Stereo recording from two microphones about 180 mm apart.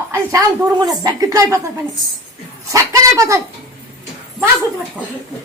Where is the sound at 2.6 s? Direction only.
15° right (ahead or behind).